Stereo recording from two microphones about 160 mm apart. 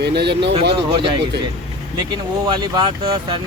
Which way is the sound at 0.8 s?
35° right (ahead or behind).